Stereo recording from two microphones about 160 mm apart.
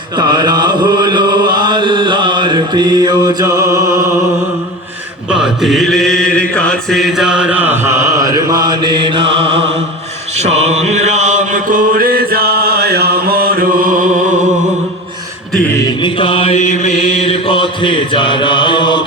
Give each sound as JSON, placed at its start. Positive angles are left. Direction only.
{"t": 0.2, "sound": "chant", "side_deg": -25}
{"t": 5.3, "sound": "mantra", "side_deg": 0}
{"t": 10.3, "sound": "chant", "side_deg": -45}
{"t": 16.0, "sound": "mantra", "side_deg": 30}